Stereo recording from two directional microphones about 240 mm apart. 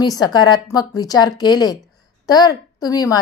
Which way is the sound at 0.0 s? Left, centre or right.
Centre.